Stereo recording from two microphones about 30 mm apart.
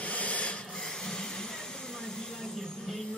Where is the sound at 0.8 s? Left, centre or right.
Centre.